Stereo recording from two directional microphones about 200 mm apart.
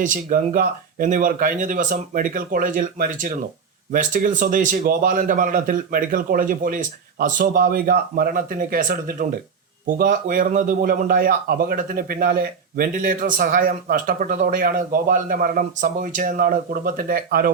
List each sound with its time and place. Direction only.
0.0 s a man's voice: 40° right (ahead or behind)